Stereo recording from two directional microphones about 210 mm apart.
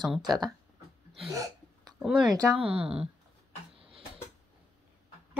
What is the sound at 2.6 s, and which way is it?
Speech, 25° right (ahead or behind).